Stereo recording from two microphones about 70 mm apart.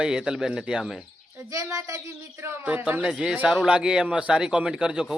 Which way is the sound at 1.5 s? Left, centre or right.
Right.